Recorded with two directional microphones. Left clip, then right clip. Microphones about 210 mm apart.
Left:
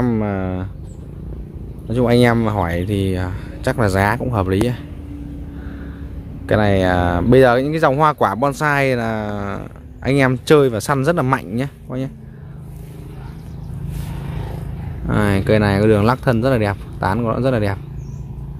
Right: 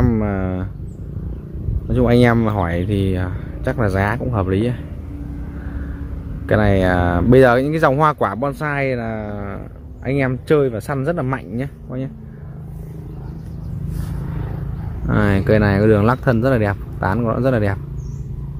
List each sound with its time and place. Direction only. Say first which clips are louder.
0.0 s a sound: even; 10° left (ahead or behind)
1.9 s speech: even; 10° left (ahead or behind)
6.4 s speech: even; 10° left (ahead or behind)
15.0 s speech: even; 10° left (ahead or behind)